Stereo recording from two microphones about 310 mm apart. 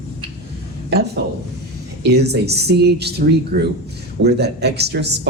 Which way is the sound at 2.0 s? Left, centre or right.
Right.